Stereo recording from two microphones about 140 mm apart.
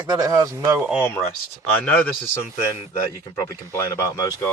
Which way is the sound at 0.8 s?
10° right (ahead or behind).